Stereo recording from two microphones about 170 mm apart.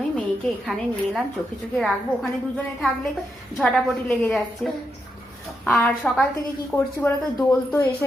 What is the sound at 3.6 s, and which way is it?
A woman's voice, 5° left (ahead or behind).